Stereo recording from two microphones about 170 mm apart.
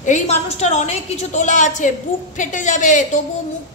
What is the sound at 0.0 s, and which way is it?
A woman's voice, 45° left (ahead or behind).